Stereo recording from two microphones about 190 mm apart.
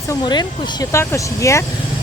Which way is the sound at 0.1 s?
20° left (ahead or behind).